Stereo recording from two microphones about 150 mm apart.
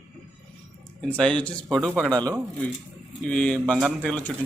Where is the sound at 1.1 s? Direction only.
5° left (ahead or behind).